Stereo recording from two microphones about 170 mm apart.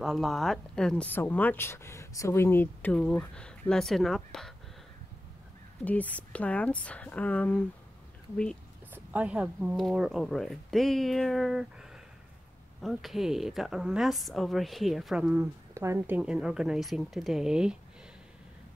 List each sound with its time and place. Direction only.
0.0 s speech: centre (ahead or behind)
5.9 s speech: 10° left (ahead or behind)
8.9 s speech: 10° right (ahead or behind)
16.2 s speech: 5° right (ahead or behind)